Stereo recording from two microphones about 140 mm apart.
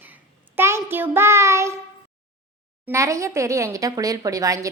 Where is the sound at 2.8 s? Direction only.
20° right (ahead or behind).